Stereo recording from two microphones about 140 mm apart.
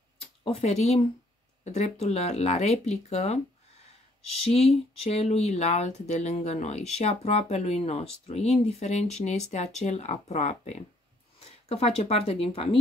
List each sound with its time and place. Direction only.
0.5 s speech: 50° left (ahead or behind)
4.4 s speech: 45° left (ahead or behind)